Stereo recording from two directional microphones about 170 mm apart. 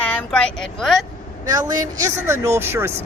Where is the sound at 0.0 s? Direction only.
5° left (ahead or behind).